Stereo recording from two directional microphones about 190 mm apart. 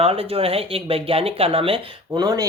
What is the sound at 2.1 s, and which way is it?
Speech, 20° right (ahead or behind).